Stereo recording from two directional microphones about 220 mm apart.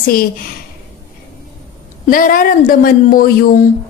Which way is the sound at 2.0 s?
40° left (ahead or behind).